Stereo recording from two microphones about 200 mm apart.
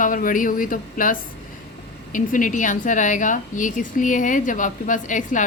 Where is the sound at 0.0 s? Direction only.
40° left (ahead or behind).